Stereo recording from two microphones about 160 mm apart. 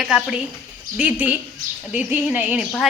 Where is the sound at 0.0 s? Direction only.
Centre (ahead or behind).